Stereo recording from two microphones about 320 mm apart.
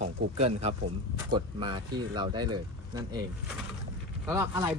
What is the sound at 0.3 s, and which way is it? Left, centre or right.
Speech, centre.